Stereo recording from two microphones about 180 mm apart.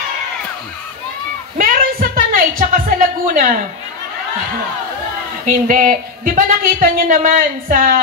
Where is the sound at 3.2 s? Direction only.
45° right (ahead or behind).